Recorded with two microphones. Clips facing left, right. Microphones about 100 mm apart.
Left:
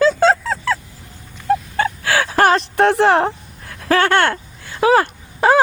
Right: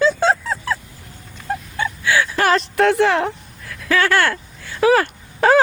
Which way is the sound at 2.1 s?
80° left.